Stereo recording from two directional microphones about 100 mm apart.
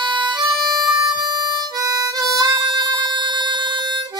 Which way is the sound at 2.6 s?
50° right (ahead or behind).